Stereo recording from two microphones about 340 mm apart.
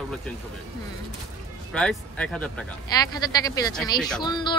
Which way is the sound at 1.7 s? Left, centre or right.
Centre.